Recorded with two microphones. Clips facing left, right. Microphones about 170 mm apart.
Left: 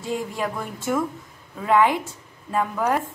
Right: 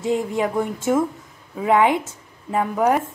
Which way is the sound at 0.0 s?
20° right (ahead or behind).